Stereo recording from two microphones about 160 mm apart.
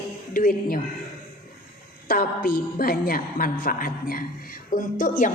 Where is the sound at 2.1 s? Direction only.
65° left (ahead or behind).